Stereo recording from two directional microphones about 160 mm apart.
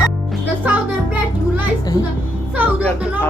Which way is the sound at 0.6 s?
10° right (ahead or behind).